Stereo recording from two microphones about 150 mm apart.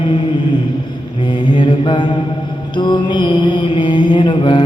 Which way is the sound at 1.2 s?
30° left (ahead or behind).